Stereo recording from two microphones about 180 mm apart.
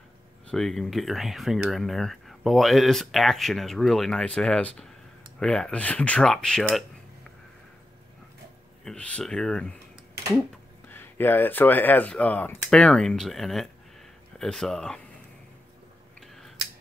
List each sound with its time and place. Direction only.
0.5 s speech: centre (ahead or behind)
8.8 s speech: 5° left (ahead or behind)
10.9 s speech: 10° left (ahead or behind)